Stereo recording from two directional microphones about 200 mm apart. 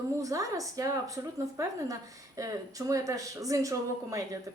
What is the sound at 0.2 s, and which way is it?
A woman's voice, 15° right (ahead or behind).